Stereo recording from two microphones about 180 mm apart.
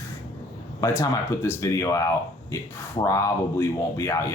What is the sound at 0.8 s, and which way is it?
Speech, 15° left (ahead or behind).